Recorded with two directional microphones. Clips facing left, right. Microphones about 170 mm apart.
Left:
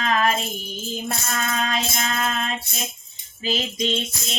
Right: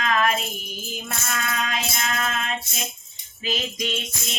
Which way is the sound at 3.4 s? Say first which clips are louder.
Left 3 dB; 30° left (ahead or behind).